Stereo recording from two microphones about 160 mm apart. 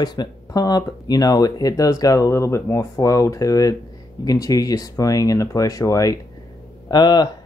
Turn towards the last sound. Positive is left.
turn(degrees=25)  # may be behind; listen again after turning